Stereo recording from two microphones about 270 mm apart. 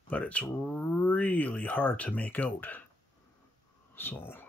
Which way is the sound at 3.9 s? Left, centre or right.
Centre.